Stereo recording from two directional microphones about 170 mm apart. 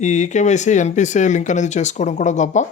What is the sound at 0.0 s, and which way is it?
Speech, 45° left (ahead or behind).